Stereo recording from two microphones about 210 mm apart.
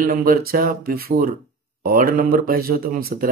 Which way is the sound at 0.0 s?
40° right (ahead or behind).